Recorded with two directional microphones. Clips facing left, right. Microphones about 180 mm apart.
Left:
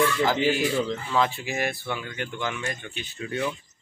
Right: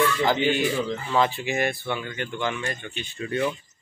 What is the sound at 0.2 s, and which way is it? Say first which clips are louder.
Speech: right 1 dB; 5° left (ahead or behind).